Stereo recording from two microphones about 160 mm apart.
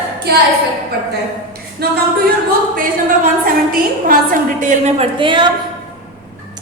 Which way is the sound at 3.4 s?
60° right (ahead or behind).